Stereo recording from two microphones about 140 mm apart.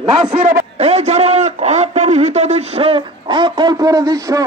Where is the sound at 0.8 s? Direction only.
50° right (ahead or behind); by 4.4 s 25° right (ahead or behind).